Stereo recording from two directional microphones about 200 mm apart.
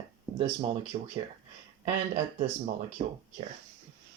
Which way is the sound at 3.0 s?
25° right (ahead or behind).